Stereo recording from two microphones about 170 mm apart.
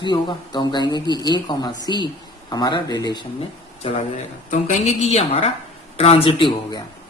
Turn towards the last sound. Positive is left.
turn(degrees=30)  # may be behind; listen again after turning